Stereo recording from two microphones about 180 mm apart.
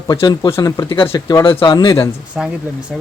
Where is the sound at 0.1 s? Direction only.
20° left (ahead or behind).